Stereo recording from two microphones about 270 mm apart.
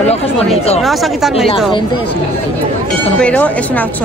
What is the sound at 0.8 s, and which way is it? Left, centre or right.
Speech, centre.